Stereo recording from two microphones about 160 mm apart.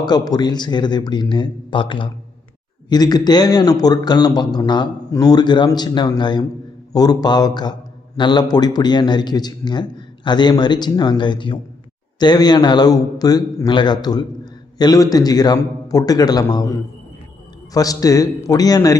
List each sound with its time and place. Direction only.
0.0 s a man's voice: 25° left (ahead or behind)
17.7 s a man's voice: 20° left (ahead or behind)